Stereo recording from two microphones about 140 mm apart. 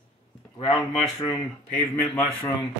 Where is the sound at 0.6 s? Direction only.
35° left (ahead or behind).